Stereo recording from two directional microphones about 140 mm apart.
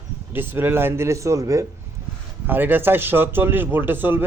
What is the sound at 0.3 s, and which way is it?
Speech, 15° right (ahead or behind).